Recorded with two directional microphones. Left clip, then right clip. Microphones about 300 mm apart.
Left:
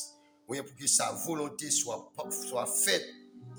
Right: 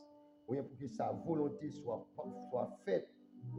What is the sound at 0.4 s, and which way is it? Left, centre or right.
Speech, left.